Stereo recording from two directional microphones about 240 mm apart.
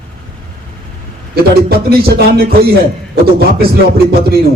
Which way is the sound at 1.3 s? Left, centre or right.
Right.